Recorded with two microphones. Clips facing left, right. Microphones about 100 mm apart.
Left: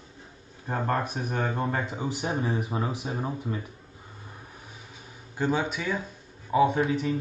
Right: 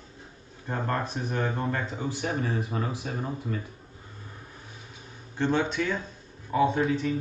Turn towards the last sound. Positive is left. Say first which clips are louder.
# left 1 dB
turn(degrees=15)  # may be behind; listen again after turning